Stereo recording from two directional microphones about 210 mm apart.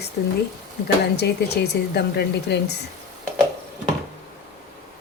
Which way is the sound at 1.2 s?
50° left (ahead or behind).